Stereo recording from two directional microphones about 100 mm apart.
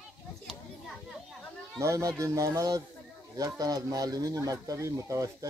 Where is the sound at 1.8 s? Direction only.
30° right (ahead or behind).